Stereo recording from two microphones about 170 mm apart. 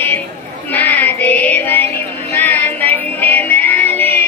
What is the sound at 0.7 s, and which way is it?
Child singing, 10° left (ahead or behind).